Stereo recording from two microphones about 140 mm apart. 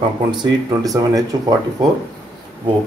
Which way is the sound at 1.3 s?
30° right (ahead or behind).